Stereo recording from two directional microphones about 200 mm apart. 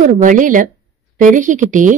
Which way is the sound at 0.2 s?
40° right (ahead or behind).